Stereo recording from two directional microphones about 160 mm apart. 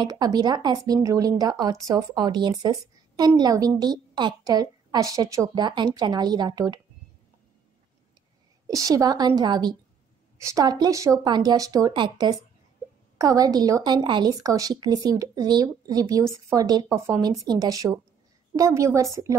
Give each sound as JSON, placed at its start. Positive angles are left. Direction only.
{"t": 0.0, "sound": "speech", "side_deg": -25}
{"t": 8.6, "sound": "speech", "side_deg": -20}